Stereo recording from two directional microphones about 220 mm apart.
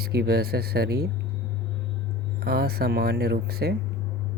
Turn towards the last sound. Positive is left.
turn(degrees=-45)  # may be behind; listen again after turning